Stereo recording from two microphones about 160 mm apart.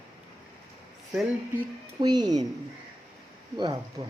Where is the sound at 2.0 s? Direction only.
25° right (ahead or behind).